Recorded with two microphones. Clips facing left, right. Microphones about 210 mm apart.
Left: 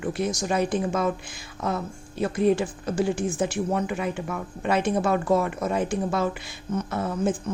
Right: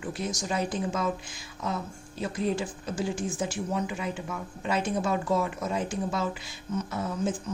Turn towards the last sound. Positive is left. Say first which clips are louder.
# left 4 dB
turn(degrees=60)  # may be behind; listen again after turning